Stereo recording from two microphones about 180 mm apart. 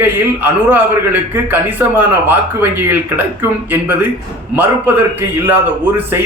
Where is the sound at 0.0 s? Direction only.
10° right (ahead or behind).